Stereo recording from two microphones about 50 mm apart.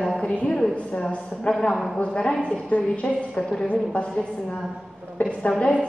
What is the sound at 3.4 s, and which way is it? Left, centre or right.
Speech, centre.